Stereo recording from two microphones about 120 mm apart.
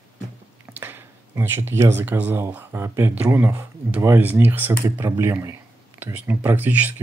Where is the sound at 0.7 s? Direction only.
15° right (ahead or behind).